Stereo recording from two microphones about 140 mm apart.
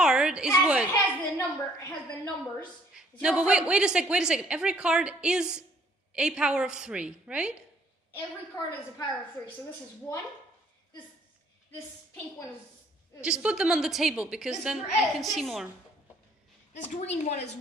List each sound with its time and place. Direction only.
0.0 s a sound: 5° right (ahead or behind)
0.9 s a sound: 20° left (ahead or behind)
2.9 s a woman's voice: 5° right (ahead or behind)
8.6 s a woman's voice: 25° left (ahead or behind)
13.2 s a woman's voice: 5° right (ahead or behind)
16.7 s a woman's voice: 55° left (ahead or behind)